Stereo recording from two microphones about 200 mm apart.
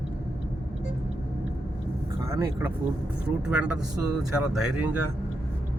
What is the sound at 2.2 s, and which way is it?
Speech, 15° right (ahead or behind).